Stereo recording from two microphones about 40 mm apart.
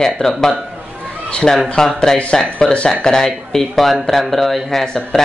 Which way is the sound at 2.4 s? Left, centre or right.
Left.